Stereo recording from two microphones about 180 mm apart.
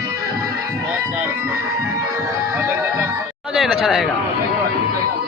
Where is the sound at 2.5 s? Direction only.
15° right (ahead or behind).